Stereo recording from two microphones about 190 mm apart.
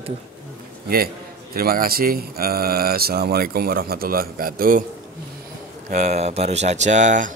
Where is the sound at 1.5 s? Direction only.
50° right (ahead or behind).